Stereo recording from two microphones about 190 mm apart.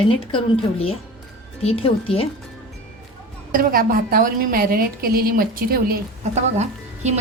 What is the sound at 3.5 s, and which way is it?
A woman's voice, 50° right (ahead or behind).